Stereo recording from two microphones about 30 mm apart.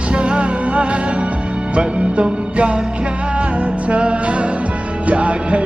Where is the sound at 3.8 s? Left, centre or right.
Right.